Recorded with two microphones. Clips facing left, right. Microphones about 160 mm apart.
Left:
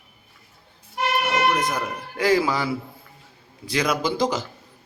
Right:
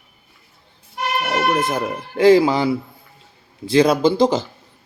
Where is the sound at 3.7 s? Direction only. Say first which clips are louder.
Right 9 dB; 30° right (ahead or behind).